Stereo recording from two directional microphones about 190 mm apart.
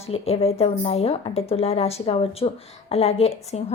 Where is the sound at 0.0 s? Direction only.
30° left (ahead or behind).